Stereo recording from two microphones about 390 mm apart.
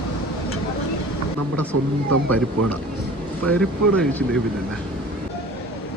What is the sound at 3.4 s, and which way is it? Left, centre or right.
Speech, centre.